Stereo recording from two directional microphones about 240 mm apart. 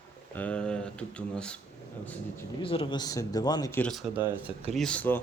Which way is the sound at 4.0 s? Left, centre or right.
Centre.